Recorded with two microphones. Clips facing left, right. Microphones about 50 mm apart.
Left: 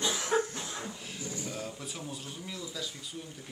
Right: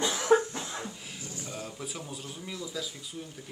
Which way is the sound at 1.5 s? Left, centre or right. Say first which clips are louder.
Even; centre.